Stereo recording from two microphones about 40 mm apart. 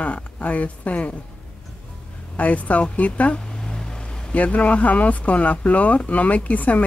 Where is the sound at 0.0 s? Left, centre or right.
Left.